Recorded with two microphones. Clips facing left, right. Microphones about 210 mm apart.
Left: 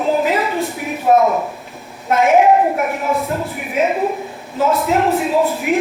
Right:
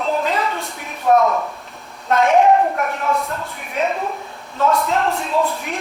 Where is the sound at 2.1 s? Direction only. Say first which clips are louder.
Left 2 dB; 5° left (ahead or behind).